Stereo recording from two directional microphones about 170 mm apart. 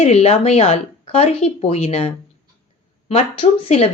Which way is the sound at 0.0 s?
40° left (ahead or behind).